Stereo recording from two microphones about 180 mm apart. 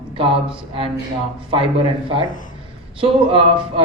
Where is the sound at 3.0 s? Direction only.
30° right (ahead or behind).